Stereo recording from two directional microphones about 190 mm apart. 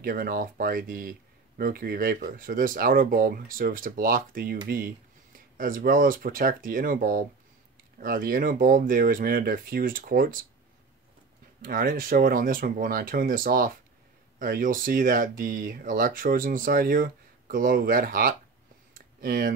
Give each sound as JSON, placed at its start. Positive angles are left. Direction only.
{"t": 0.0, "sound": "speech", "side_deg": -50}
{"t": 11.6, "sound": "speech", "side_deg": -50}
{"t": 18.9, "sound": "a sound", "side_deg": -50}